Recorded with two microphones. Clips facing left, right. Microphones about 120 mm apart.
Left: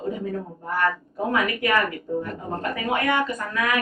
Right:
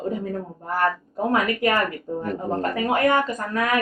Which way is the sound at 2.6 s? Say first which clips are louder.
Right 4 dB; 40° right (ahead or behind).